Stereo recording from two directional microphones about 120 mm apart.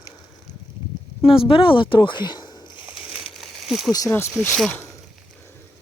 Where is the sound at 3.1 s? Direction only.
Centre (ahead or behind).